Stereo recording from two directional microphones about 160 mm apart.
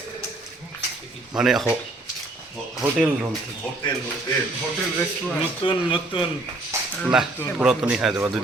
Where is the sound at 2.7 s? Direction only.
Centre (ahead or behind).